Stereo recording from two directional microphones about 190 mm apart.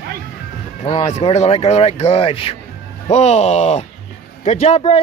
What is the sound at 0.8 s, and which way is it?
Speech, 30° left (ahead or behind).